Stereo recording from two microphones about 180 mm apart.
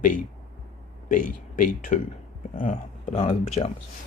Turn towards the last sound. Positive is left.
turn(degrees=35)  # may be behind; listen again after turning